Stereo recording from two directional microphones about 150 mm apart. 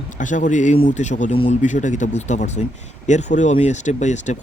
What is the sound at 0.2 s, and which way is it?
Speech, 60° left (ahead or behind).